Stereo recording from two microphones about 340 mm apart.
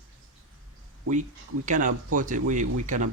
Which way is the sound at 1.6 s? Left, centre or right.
Right.